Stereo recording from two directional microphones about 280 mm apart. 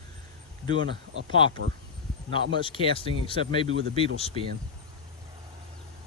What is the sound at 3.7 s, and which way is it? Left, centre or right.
Speech, right.